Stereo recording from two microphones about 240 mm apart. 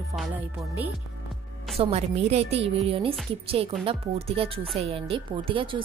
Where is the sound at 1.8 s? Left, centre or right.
Right.